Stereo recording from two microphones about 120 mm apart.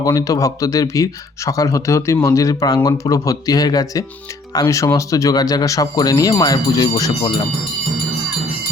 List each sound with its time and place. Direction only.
0.0 s speech: 30° left (ahead or behind)